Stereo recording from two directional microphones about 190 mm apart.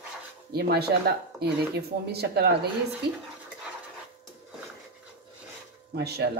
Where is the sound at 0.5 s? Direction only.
55° right (ahead or behind).